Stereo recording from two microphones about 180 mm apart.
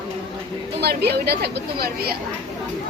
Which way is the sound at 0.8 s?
65° right (ahead or behind).